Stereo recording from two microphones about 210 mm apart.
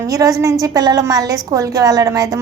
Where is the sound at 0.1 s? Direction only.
15° right (ahead or behind).